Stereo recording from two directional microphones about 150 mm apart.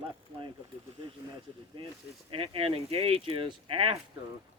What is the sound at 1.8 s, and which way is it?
Speech, 35° right (ahead or behind).